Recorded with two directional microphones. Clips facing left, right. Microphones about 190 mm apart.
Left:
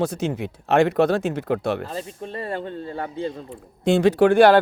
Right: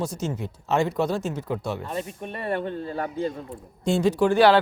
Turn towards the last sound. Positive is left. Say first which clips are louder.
# left 4 dB
turn(degrees=55)  # may be behind; listen again after turning